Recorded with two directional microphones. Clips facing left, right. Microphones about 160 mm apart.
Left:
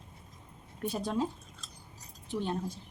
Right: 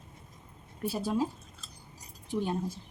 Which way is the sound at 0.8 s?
5° right (ahead or behind).